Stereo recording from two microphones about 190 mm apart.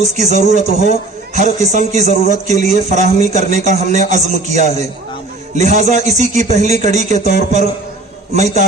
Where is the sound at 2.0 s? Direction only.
35° left (ahead or behind).